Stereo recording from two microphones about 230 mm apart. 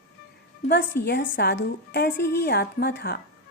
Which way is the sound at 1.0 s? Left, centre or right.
Left.